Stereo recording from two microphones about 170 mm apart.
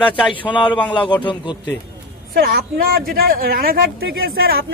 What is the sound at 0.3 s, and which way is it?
A man's voice, 30° left (ahead or behind).